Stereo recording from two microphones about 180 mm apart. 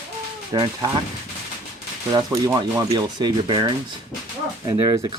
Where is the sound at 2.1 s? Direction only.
20° right (ahead or behind).